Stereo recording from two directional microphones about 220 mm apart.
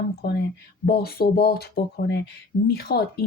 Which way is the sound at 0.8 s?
45° left (ahead or behind).